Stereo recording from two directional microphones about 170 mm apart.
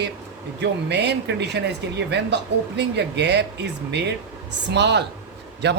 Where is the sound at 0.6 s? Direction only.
90° right.